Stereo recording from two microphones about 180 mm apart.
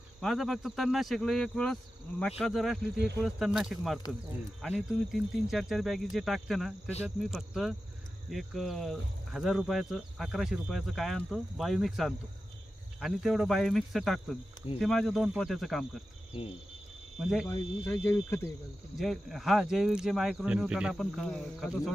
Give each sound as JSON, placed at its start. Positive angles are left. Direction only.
{"t": 0.2, "sound": "speech", "side_deg": 0}
{"t": 16.3, "sound": "cricket", "side_deg": 30}
{"t": 17.2, "sound": "speech", "side_deg": -5}
{"t": 18.0, "sound": "speech", "side_deg": 15}
{"t": 18.9, "sound": "speech", "side_deg": 0}